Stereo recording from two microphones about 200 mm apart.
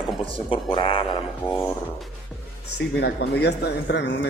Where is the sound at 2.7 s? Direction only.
55° left (ahead or behind).